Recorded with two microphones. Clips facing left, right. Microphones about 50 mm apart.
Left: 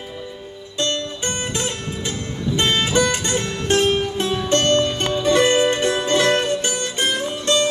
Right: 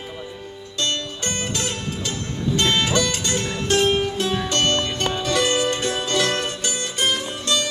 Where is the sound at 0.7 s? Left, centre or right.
Left.